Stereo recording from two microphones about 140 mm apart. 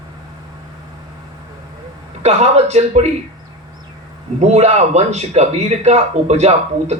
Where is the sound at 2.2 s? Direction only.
50° right (ahead or behind).